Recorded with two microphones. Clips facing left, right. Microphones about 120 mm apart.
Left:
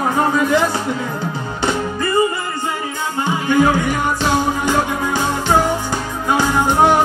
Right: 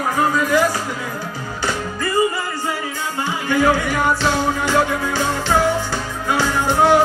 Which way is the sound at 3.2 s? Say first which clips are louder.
Left 2 dB; 20° left (ahead or behind).